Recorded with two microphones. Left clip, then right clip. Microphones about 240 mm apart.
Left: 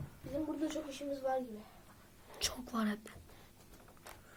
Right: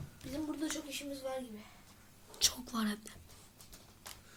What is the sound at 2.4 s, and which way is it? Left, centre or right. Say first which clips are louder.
Speech: right 4 dB; centre.